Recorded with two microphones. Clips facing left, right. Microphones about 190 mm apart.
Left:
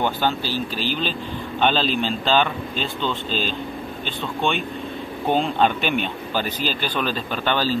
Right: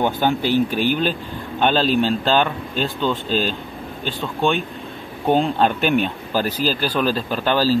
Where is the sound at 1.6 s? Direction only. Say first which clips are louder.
Right 4 dB; 5° right (ahead or behind).